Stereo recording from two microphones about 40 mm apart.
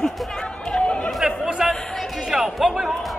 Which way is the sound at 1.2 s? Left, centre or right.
Centre.